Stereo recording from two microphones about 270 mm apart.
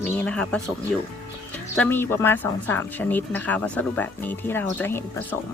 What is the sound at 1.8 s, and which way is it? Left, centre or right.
Speech, centre.